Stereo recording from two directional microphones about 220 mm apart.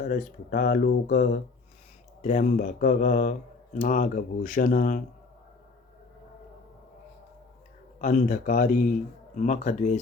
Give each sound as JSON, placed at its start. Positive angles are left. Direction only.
{"t": 0.0, "sound": "speech", "side_deg": 35}
{"t": 8.0, "sound": "speech", "side_deg": 35}